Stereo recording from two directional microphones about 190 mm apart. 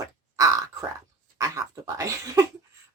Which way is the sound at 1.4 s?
15° right (ahead or behind).